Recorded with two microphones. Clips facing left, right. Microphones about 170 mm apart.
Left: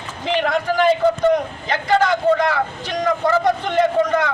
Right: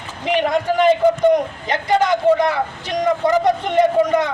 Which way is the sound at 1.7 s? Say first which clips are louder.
Even; 20° right (ahead or behind).